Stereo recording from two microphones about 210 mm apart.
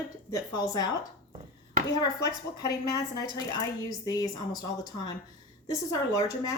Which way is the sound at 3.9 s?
20° left (ahead or behind).